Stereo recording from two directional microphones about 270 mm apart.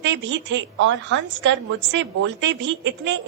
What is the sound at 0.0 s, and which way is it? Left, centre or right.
A woman's voice, right.